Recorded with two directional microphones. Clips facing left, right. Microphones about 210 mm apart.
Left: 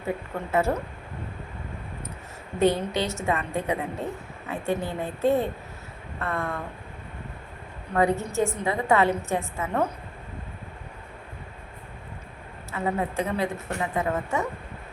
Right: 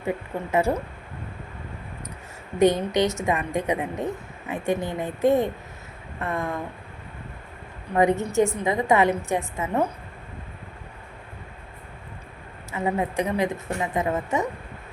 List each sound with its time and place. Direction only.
0.3 s a woman's voice: 15° right (ahead or behind)
2.6 s a woman's voice: 15° right (ahead or behind)
7.9 s a woman's voice: 20° right (ahead or behind)
12.7 s a woman's voice: 15° right (ahead or behind)